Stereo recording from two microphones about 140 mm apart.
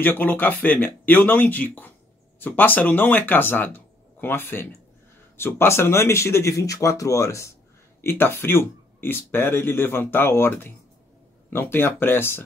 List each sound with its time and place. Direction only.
0.0 s speech: 15° left (ahead or behind)